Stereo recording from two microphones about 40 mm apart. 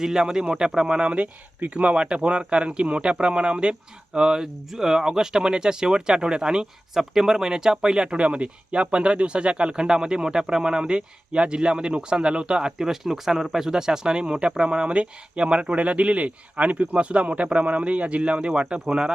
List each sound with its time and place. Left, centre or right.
0.0 s speech: centre
1.1 s speech: right